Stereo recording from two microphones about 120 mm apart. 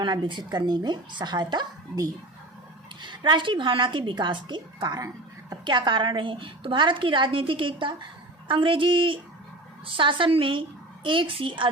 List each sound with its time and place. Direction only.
0.0 s a woman's voice: 40° right (ahead or behind)